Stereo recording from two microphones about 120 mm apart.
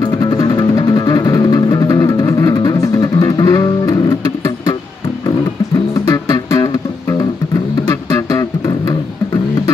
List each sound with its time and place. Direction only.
0.0 s music: 35° left (ahead or behind)
6.0 s music: 30° left (ahead or behind)